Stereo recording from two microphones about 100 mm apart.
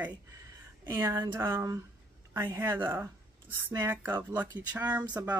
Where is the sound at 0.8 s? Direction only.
25° right (ahead or behind).